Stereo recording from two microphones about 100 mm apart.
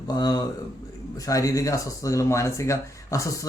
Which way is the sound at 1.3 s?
35° left (ahead or behind).